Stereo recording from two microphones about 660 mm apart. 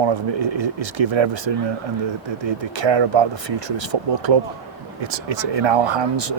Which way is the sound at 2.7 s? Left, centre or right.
Right.